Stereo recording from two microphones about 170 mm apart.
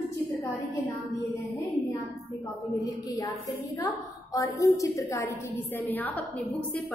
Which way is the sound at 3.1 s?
20° left (ahead or behind).